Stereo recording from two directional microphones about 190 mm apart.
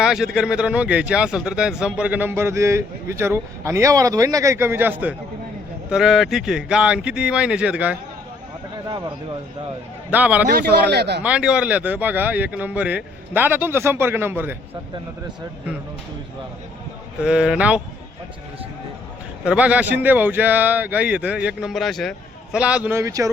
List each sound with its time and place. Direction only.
0.0 s a sound: centre (ahead or behind)
0.3 s speech: 5° right (ahead or behind)
10.1 s speech: 10° right (ahead or behind)
10.5 s speech: 60° right (ahead or behind)
11.2 s speech: 5° right (ahead or behind)
17.2 s speech: 5° right (ahead or behind)
19.5 s speech: 5° right (ahead or behind)